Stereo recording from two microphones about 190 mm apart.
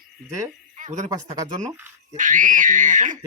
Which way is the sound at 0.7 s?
40° right (ahead or behind).